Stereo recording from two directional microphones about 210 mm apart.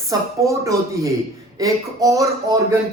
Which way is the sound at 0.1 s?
15° right (ahead or behind).